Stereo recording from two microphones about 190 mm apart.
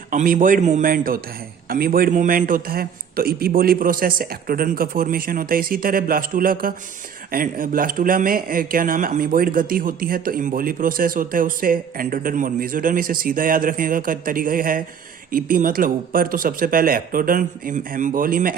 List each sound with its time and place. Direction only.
0.1 s speech: 45° right (ahead or behind)